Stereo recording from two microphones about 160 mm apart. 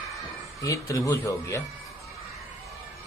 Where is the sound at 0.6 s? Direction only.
20° left (ahead or behind).